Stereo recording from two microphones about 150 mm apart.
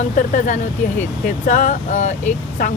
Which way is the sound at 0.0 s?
55° left (ahead or behind).